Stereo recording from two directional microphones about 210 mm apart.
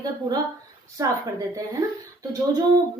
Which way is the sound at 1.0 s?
15° right (ahead or behind).